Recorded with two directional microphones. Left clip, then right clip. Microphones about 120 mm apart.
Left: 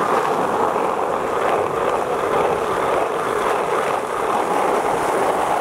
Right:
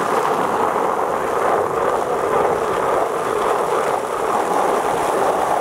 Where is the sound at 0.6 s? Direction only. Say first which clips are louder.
Right 1 dB; 15° left (ahead or behind).